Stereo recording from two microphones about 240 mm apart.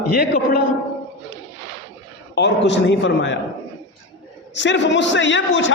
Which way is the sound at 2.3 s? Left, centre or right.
Left.